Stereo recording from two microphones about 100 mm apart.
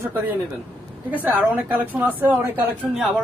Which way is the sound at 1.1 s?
15° right (ahead or behind).